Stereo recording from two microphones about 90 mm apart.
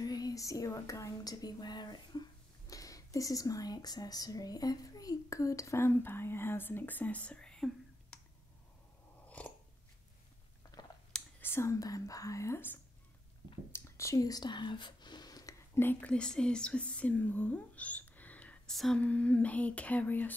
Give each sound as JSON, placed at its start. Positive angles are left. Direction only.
{"t": 0.0, "sound": "a sound", "side_deg": 45}
{"t": 2.7, "sound": "speech", "side_deg": 40}
{"t": 9.4, "sound": "dog", "side_deg": 15}
{"t": 11.4, "sound": "speech", "side_deg": 30}
{"t": 15.7, "sound": "speech", "side_deg": 25}
{"t": 16.1, "sound": "speech", "side_deg": 10}
{"t": 18.7, "sound": "a sound", "side_deg": 5}
{"t": 18.9, "sound": "speech", "side_deg": 15}